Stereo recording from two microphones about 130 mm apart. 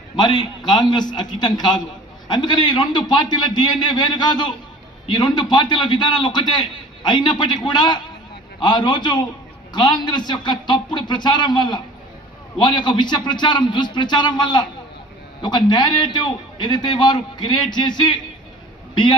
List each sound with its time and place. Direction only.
0.2 s a man's voice: 35° left (ahead or behind)